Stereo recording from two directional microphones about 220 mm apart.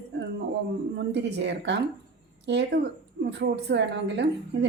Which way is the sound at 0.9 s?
55° right (ahead or behind).